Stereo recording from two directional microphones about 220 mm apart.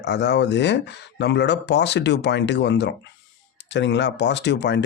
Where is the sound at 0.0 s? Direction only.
50° left (ahead or behind).